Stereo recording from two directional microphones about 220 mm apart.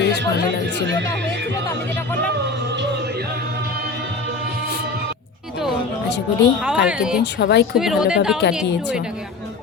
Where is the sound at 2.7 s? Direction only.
50° right (ahead or behind).